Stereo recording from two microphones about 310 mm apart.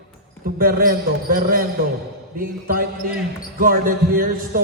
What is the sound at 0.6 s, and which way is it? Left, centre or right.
Music, right.